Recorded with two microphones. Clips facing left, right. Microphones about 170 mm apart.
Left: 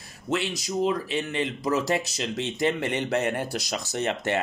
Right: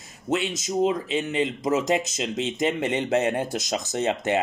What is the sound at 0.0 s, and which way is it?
Speech, 20° right (ahead or behind).